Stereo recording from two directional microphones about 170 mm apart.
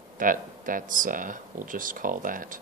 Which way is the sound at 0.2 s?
55° right (ahead or behind).